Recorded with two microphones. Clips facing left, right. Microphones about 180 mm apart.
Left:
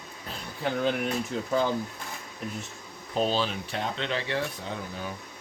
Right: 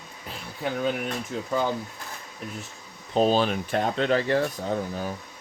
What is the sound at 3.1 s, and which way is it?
Speech, 45° right (ahead or behind).